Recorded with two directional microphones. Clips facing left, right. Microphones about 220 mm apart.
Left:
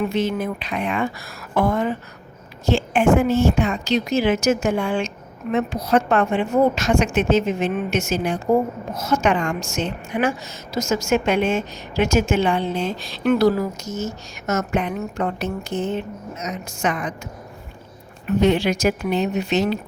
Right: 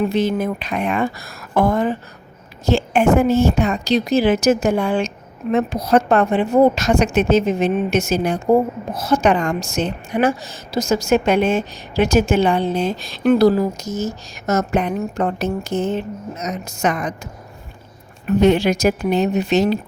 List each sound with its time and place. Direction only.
0.0 s a woman's voice: 35° right (ahead or behind)
18.3 s a woman's voice: 45° right (ahead or behind)